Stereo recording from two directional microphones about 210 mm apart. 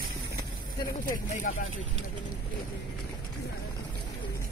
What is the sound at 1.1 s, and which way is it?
Speech, 40° left (ahead or behind).